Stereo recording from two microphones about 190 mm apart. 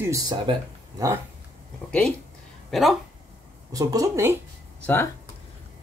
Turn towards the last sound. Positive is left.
turn(degrees=10)  # may be behind; listen again after turning